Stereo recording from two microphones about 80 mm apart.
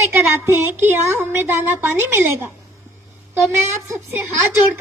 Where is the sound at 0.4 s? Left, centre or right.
Right.